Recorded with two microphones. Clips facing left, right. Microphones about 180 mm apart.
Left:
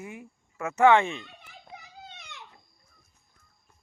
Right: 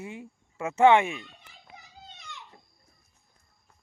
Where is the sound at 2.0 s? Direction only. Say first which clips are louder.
Left 1 dB; 65° left (ahead or behind).